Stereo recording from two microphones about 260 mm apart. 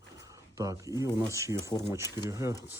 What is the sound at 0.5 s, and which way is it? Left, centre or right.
Speech, centre.